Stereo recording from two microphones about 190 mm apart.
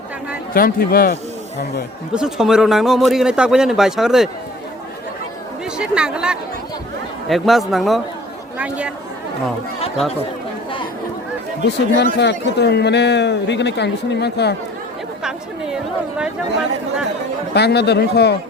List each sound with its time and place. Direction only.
0.5 s speech: 50° left (ahead or behind)
2.1 s speech: 5° right (ahead or behind)
5.7 s speech: 5° right (ahead or behind)
11.9 s a man's voice: 60° left (ahead or behind)
15.2 s a woman's voice: 5° right (ahead or behind)
17.5 s a man's voice: 60° left (ahead or behind)